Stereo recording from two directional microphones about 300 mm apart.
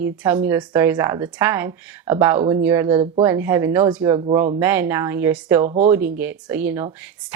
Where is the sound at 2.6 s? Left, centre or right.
Centre.